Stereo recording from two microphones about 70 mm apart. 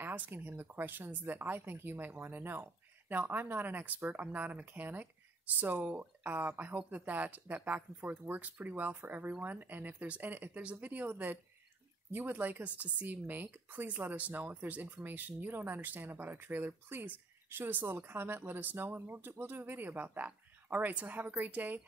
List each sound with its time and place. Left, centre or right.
0.0 s speech: right